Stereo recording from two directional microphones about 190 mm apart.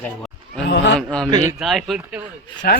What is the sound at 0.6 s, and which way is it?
Speech, 65° left (ahead or behind).